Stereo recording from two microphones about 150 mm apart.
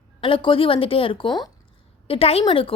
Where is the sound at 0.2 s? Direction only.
35° left (ahead or behind).